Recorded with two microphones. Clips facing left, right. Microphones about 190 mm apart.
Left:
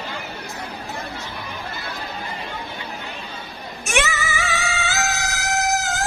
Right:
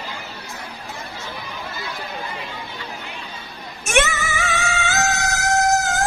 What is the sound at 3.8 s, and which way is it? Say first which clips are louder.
Music: right 3 dB; 50° right (ahead or behind).